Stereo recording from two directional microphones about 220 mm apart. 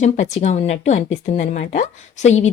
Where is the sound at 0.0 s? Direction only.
30° left (ahead or behind).